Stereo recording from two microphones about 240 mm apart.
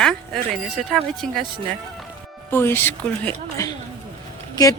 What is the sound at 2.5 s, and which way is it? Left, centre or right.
Speech, centre.